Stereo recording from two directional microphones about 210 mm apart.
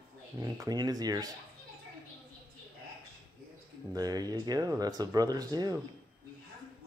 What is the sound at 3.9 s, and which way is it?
Speech, 20° right (ahead or behind).